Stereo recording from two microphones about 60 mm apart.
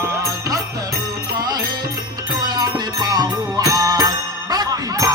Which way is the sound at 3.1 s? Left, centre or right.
Right.